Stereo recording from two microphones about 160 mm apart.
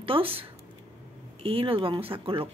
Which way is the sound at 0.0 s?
35° right (ahead or behind).